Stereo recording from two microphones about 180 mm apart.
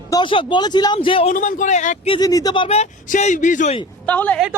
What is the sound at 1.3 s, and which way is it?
Speech, 45° left (ahead or behind).